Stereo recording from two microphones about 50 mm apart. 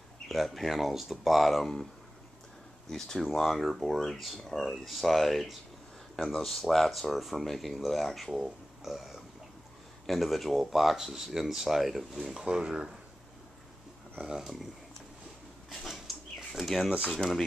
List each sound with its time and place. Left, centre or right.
0.3 s speech: centre
2.9 s speech: centre
3.3 s speech: centre
12.1 s speech: centre
14.2 s speech: centre
15.7 s a sound: centre